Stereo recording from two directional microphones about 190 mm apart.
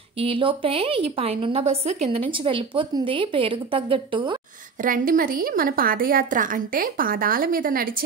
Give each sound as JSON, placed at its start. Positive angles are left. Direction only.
{"t": 0.2, "sound": "speech", "side_deg": -25}
{"t": 4.8, "sound": "a woman's voice", "side_deg": -45}